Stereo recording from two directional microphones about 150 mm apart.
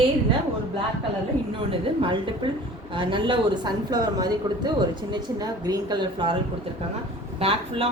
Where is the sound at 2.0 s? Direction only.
35° right (ahead or behind).